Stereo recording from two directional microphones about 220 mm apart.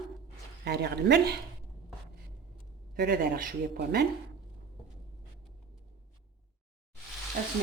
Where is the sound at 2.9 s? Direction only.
45° right (ahead or behind).